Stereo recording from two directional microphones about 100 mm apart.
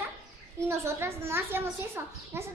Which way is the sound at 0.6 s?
25° right (ahead or behind).